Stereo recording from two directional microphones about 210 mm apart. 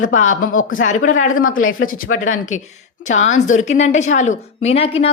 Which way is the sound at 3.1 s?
35° left (ahead or behind).